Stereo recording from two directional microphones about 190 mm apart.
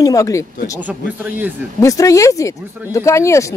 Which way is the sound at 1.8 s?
15° left (ahead or behind).